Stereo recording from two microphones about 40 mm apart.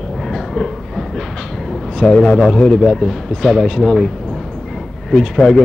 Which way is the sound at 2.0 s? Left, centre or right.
Left.